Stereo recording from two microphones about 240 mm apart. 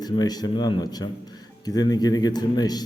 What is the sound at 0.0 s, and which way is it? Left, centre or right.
A man's voice, centre.